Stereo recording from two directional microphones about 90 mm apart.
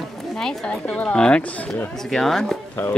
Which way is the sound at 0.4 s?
5° left (ahead or behind).